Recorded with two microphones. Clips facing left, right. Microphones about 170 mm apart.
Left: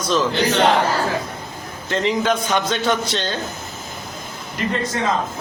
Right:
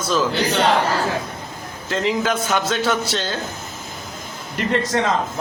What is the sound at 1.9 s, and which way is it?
A man's voice, centre (ahead or behind).